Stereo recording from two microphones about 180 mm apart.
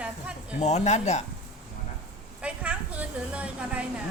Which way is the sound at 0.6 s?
40° left (ahead or behind).